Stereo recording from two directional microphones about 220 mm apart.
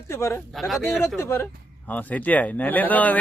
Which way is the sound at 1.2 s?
10° left (ahead or behind).